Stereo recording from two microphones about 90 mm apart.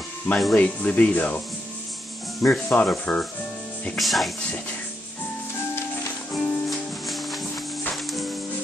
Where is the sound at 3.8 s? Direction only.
Centre (ahead or behind).